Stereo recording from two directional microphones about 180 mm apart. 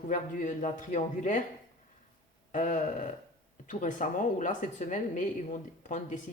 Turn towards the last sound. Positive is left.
turn(degrees=45)  # may be behind; listen again after turning